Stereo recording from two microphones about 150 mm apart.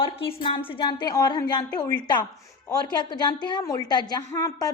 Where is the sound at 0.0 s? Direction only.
40° left (ahead or behind).